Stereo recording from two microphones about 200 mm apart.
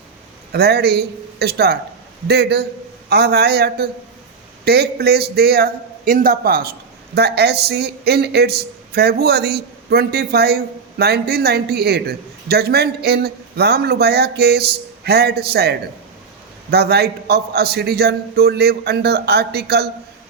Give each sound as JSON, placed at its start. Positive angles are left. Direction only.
{"t": 0.5, "sound": "a man's voice", "side_deg": -55}